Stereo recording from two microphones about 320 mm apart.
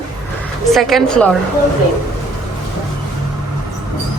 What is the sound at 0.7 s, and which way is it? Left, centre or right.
Speech, centre.